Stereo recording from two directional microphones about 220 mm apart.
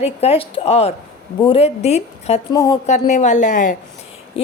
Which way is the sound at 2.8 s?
30° left (ahead or behind).